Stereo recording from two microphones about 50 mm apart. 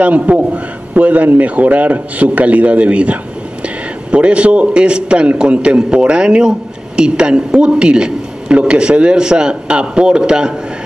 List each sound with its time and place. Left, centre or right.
0.0 s a man's voice: right